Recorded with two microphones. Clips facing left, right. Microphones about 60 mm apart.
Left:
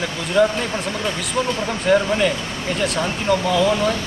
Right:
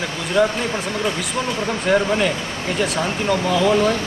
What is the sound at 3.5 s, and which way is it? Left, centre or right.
Speech, centre.